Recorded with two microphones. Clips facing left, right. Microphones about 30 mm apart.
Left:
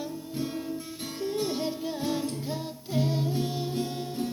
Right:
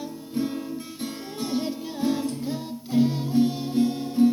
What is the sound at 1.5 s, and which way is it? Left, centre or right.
Music, centre.